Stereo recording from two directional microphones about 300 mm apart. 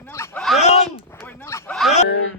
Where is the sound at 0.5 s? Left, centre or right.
Left.